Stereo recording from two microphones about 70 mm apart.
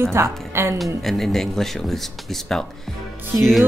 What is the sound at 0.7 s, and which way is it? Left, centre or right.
Speech, centre.